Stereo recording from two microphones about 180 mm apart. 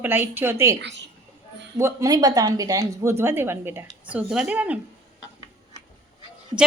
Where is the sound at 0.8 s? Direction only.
80° right.